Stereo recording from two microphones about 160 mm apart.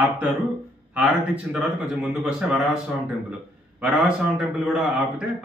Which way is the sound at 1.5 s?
5° right (ahead or behind).